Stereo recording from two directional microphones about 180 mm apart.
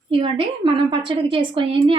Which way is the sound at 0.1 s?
30° right (ahead or behind).